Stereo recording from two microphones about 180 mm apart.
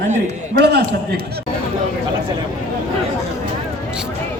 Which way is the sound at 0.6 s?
65° right (ahead or behind).